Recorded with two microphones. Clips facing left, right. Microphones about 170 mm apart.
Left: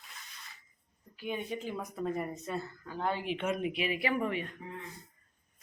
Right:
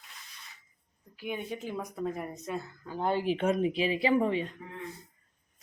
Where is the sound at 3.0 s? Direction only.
35° right (ahead or behind).